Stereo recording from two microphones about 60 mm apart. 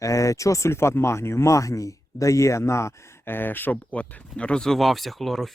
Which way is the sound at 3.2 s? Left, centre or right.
Left.